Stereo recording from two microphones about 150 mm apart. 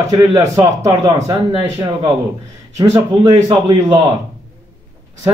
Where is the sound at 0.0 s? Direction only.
25° right (ahead or behind).